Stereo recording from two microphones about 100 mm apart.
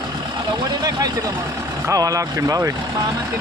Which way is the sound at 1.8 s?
35° right (ahead or behind).